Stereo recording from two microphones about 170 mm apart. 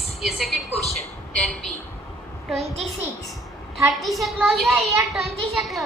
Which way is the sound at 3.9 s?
Centre (ahead or behind).